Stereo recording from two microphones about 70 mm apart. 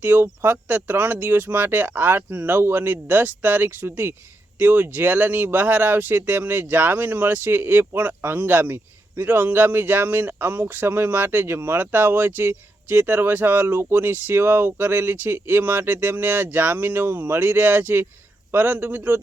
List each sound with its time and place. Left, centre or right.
0.0 s speech: right